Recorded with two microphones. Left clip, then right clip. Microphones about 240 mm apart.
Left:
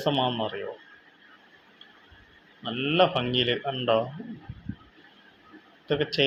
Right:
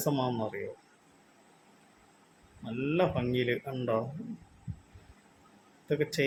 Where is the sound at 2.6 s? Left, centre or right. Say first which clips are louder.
Left 7 dB; centre.